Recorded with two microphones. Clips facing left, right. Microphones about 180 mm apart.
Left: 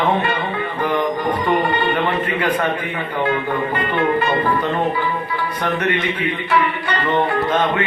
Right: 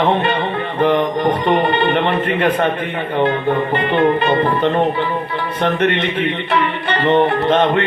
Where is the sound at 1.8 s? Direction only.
65° right (ahead or behind).